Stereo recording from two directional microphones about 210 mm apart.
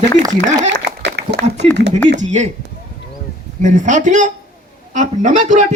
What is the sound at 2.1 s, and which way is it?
Speech, 35° right (ahead or behind).